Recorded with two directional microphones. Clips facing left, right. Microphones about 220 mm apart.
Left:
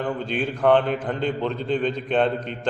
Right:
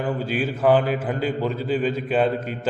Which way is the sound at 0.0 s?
5° right (ahead or behind).